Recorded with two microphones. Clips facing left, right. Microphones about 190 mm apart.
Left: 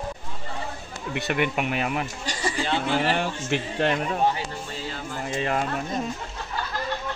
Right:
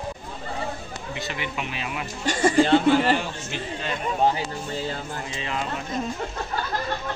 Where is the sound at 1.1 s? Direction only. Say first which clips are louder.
Left 7 dB; 60° left (ahead or behind).